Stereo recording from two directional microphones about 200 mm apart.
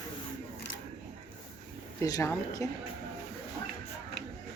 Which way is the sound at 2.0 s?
15° left (ahead or behind).